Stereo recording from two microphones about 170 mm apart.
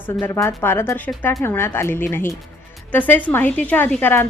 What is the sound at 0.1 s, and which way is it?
A woman's voice, 15° left (ahead or behind).